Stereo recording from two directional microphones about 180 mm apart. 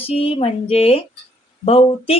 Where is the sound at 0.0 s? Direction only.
30° left (ahead or behind).